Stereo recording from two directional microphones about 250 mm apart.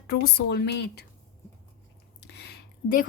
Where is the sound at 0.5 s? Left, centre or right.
Left.